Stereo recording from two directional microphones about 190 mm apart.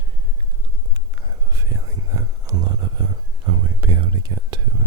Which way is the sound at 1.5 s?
15° right (ahead or behind).